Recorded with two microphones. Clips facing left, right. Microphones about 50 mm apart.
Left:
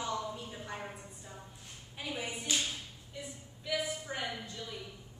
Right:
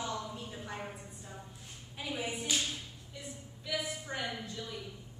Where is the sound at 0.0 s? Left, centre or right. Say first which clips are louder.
Left 2 dB; centre.